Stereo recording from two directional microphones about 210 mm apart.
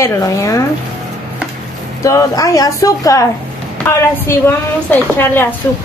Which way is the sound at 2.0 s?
15° left (ahead or behind).